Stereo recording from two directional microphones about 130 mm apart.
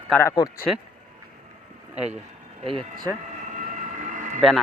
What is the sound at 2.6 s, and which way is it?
Speech, 45° right (ahead or behind).